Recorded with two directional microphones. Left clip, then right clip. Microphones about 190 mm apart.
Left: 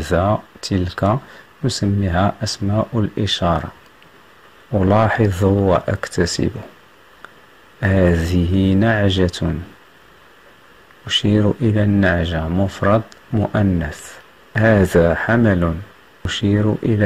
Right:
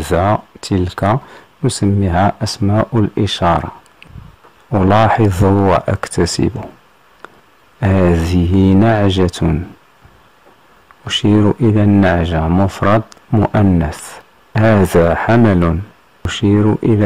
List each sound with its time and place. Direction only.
0.0 s speech: 20° right (ahead or behind)
4.7 s speech: 20° right (ahead or behind)
7.8 s speech: 20° right (ahead or behind)
11.1 s speech: 25° right (ahead or behind)